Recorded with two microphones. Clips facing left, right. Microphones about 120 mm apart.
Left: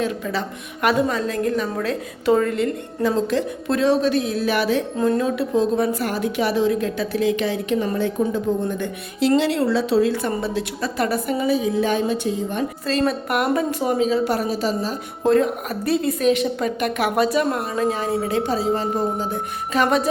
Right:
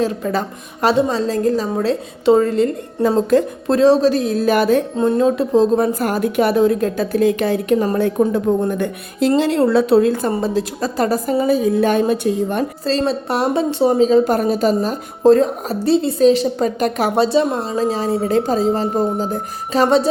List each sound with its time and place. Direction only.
0.8 s a woman's voice: 30° right (ahead or behind); by 4.8 s 45° right (ahead or behind)
4.9 s a woman's voice: 30° right (ahead or behind); by 10.2 s 55° right (ahead or behind)
10.2 s a woman's voice: 40° right (ahead or behind); by 12.6 s 55° right (ahead or behind)
12.8 s a woman's voice: 30° right (ahead or behind); by 14.9 s 50° right (ahead or behind)
15.2 s a woman's voice: 35° right (ahead or behind)